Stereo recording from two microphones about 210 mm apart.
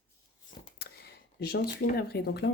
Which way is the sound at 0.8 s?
50° left (ahead or behind).